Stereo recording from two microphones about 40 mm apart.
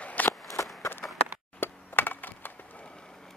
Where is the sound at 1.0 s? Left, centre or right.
Left.